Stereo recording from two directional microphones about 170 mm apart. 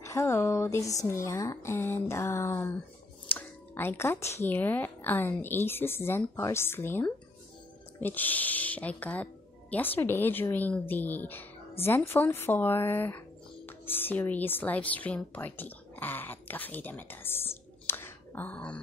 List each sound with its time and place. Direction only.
0.0 s speech: 15° left (ahead or behind)